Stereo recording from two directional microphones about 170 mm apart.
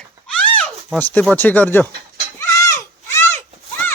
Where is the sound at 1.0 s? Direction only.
10° left (ahead or behind).